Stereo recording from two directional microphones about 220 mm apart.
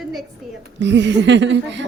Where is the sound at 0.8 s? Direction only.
55° right (ahead or behind).